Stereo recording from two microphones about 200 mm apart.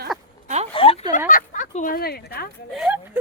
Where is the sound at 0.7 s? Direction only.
30° left (ahead or behind).